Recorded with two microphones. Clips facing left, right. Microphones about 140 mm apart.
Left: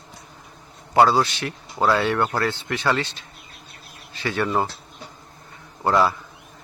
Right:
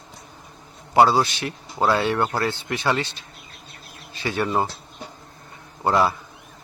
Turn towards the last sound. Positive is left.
turn(degrees=-15)  # may be behind; listen again after turning